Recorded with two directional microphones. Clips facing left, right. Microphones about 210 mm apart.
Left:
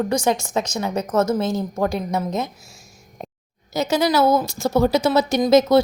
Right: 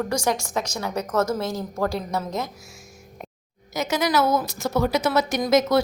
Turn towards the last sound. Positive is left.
turn(degrees=25)  # may be behind; listen again after turning